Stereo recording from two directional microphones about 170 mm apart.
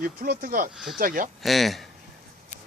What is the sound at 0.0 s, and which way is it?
Speech, 55° right (ahead or behind).